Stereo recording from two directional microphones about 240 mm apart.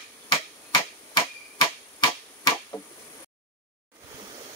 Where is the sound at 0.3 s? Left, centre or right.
Centre.